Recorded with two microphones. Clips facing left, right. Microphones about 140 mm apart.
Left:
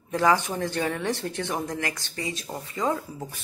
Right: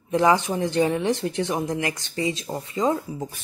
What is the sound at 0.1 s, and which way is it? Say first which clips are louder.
A woman's voice: right 3 dB; 20° right (ahead or behind).